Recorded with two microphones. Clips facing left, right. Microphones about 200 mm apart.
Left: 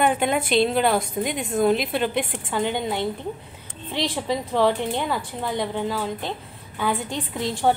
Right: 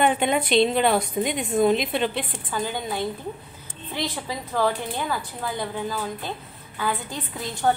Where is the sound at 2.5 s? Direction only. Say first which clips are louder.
Left 3 dB; 25° left (ahead or behind).